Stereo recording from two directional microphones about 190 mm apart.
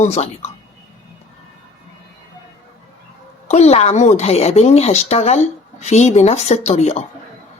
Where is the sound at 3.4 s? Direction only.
35° left (ahead or behind).